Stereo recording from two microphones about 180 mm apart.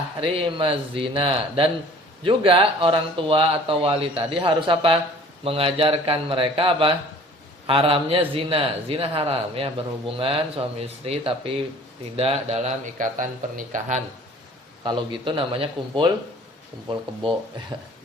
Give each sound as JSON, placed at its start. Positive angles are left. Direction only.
{"t": 0.2, "sound": "speech", "side_deg": -30}
{"t": 14.8, "sound": "a man's voice", "side_deg": -25}